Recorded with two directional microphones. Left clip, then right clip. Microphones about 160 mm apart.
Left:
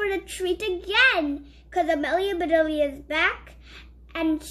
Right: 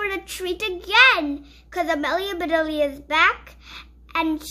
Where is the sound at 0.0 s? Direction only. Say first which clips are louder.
Even; 25° right (ahead or behind).